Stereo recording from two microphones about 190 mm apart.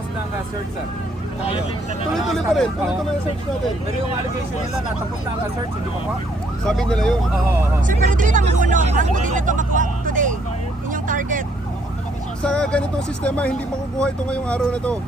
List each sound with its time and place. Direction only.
2.1 s speech: centre (ahead or behind)
6.7 s speech: 5° left (ahead or behind)
7.9 s speech: 45° right (ahead or behind)
12.4 s speech: 5° left (ahead or behind)